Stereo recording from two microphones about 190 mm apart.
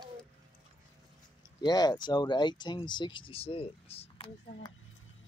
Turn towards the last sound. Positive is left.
turn(degrees=30)  # may be behind; listen again after turning